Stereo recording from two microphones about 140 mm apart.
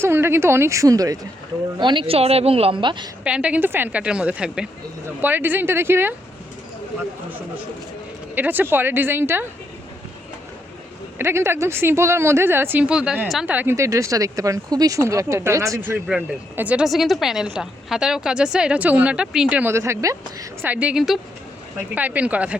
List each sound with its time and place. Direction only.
0.0 s speech: 15° right (ahead or behind)
1.8 s speech: 35° right (ahead or behind)
3.2 s speech: 10° right (ahead or behind)
8.4 s speech: 15° right (ahead or behind)
11.2 s speech: 15° right (ahead or behind)
16.0 s speech: 10° right (ahead or behind)